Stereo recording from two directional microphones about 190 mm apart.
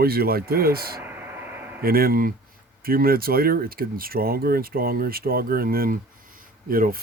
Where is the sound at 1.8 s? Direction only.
50° right (ahead or behind).